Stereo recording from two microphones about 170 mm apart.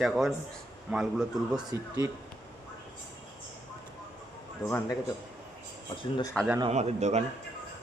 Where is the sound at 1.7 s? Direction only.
20° right (ahead or behind).